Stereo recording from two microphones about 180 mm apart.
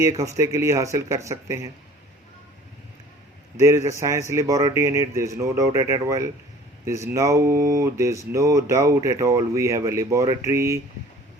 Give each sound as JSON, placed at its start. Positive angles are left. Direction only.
{"t": 0.0, "sound": "speech", "side_deg": -20}
{"t": 3.6, "sound": "speech", "side_deg": -15}